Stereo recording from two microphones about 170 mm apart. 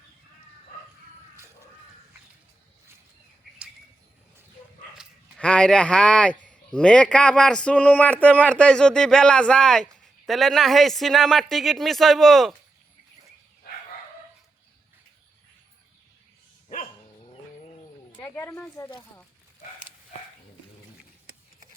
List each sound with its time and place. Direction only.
5.4 s speech: 5° left (ahead or behind)
16.6 s dog: 40° left (ahead or behind)
18.2 s speech: 10° left (ahead or behind)